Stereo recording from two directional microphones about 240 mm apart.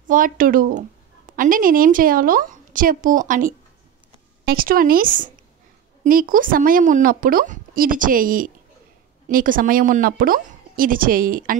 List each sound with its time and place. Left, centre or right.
0.0 s a woman's voice: right